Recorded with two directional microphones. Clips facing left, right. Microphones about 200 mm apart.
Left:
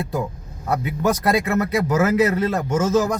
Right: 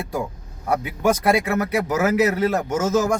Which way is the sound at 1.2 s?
10° right (ahead or behind).